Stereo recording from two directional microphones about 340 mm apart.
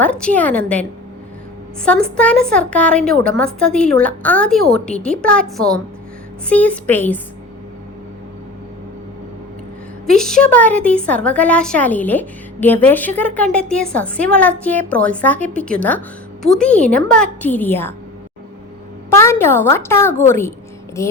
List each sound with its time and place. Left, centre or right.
0.0 s a woman's voice: centre
10.1 s a woman's voice: centre
19.1 s a woman's voice: centre